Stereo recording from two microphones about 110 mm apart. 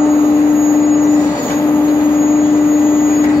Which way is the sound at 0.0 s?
25° left (ahead or behind).